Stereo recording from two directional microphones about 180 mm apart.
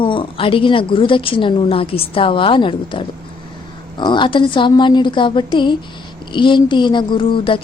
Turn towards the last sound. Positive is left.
turn(degrees=30)  # may be behind; listen again after turning